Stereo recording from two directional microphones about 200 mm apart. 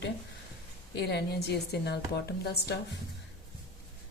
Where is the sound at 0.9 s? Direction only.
55° left (ahead or behind).